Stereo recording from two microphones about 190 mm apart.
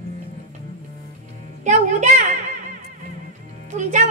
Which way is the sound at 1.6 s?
40° right (ahead or behind).